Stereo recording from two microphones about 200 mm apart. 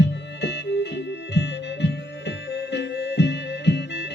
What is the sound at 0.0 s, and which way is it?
Music, 60° left (ahead or behind).